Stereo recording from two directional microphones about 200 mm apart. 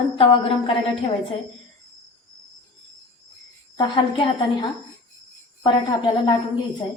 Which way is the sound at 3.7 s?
25° left (ahead or behind).